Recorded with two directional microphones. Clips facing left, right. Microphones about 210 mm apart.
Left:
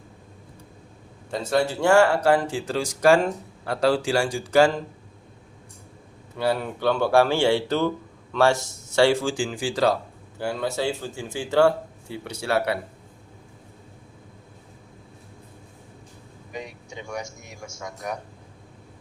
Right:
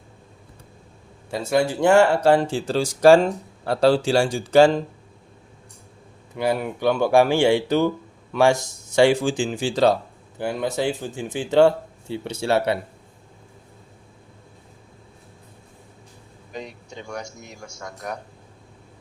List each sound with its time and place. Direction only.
1.3 s speech: 10° right (ahead or behind); by 4.7 s 25° right (ahead or behind)
6.3 s speech: 15° right (ahead or behind)
16.5 s a man's voice: 10° left (ahead or behind)